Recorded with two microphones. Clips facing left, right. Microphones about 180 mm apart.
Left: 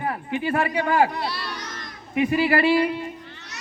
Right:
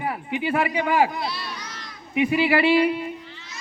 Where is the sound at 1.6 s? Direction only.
50° left (ahead or behind).